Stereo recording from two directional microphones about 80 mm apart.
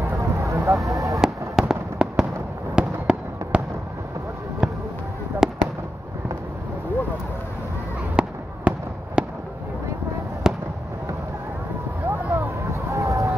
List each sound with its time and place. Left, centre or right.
0.2 s a sound: right
0.8 s speech: right
1.6 s fireworks: centre
4.6 s music: centre
5.4 s fireworks: centre
8.2 s fireworks: centre
10.4 s fireworks: centre
12.1 s vehicle: right
12.6 s a sound: right